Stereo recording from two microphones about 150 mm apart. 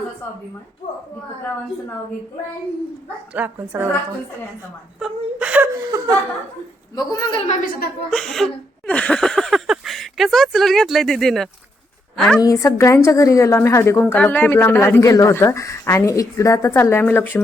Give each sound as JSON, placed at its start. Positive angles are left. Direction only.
{"t": 3.3, "sound": "speech", "side_deg": -10}
{"t": 4.9, "sound": "speech", "side_deg": -5}
{"t": 6.9, "sound": "speech", "side_deg": 25}
{"t": 7.4, "sound": "a woman's voice", "side_deg": 55}
{"t": 8.1, "sound": "a woman's voice", "side_deg": 0}
{"t": 12.4, "sound": "speech", "side_deg": 20}